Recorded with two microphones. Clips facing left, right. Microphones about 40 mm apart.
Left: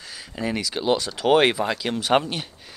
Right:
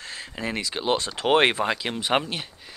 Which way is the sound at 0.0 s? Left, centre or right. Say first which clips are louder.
Right 3 dB; right.